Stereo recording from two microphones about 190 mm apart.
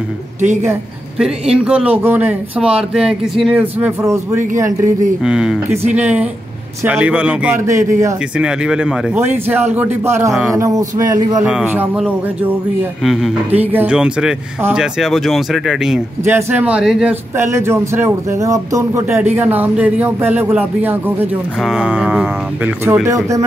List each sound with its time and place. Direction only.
1.5 s a man's voice: 5° right (ahead or behind)
5.2 s a man's voice: 5° right (ahead or behind)
8.4 s speech: 5° right (ahead or behind)
11.4 s a man's voice: 5° right (ahead or behind)
22.8 s speech: 15° right (ahead or behind)